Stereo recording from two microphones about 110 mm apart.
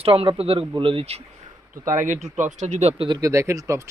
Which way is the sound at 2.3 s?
90° right.